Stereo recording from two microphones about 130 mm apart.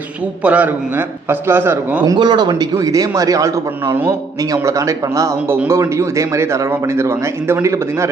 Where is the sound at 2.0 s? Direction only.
30° right (ahead or behind).